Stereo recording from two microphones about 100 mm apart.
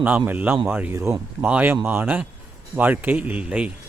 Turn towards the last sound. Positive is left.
turn(degrees=-10)  # may be behind; listen again after turning